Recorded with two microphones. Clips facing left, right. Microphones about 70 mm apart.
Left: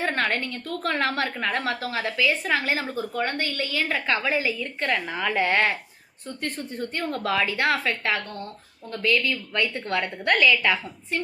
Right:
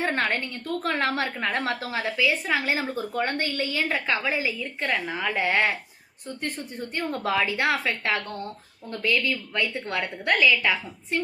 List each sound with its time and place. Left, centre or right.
0.0 s a woman's voice: right
2.9 s a woman's voice: right; by 10.8 s centre
11.1 s a woman's voice: right